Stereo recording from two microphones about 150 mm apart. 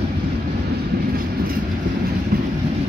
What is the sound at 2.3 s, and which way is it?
Vehicle, 85° right.